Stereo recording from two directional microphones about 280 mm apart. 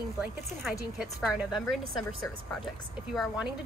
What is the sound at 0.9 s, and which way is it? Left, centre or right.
Speech, centre.